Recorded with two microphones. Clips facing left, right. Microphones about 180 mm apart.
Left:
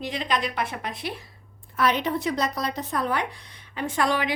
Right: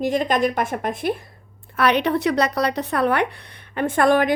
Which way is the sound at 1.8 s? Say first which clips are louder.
Right 5 dB; 70° right (ahead or behind).